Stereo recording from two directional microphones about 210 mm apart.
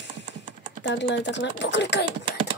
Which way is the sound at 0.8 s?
60° left (ahead or behind).